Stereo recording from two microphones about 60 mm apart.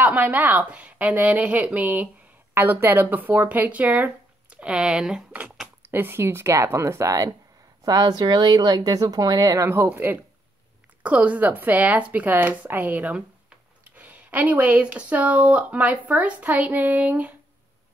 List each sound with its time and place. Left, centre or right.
0.0 s speech: right
2.5 s speech: right; by 5.2 s centre
5.8 s speech: right
7.8 s speech: right
9.7 s speech: right